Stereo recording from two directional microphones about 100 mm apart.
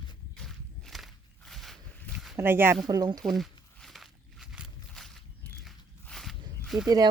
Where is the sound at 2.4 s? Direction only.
25° right (ahead or behind).